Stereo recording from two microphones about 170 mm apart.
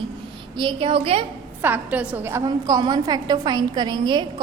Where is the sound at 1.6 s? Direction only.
10° right (ahead or behind).